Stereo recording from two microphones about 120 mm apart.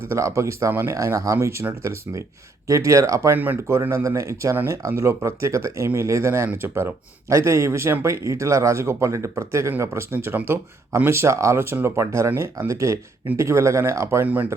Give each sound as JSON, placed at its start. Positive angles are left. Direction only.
{"t": 0.1, "sound": "speech", "side_deg": -25}
{"t": 3.3, "sound": "speech", "side_deg": -15}